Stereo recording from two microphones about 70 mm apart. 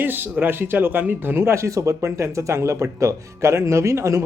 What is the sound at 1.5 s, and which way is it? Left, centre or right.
Speech, right.